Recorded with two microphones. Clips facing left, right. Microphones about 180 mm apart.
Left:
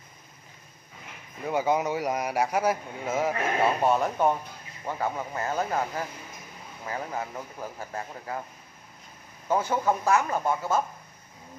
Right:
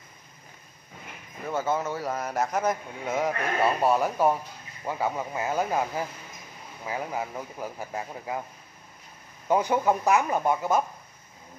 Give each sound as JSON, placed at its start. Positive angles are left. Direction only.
{"t": 1.5, "sound": "a man's voice", "side_deg": 15}
{"t": 9.5, "sound": "speech", "side_deg": -15}